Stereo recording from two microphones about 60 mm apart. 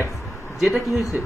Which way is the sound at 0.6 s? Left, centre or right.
Centre.